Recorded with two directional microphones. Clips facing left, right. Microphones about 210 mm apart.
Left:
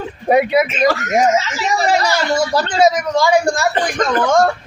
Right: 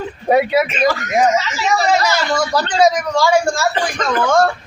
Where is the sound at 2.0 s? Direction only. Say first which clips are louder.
Left 1 dB; 25° left (ahead or behind).